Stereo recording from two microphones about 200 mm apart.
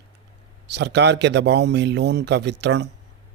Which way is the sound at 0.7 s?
60° right (ahead or behind).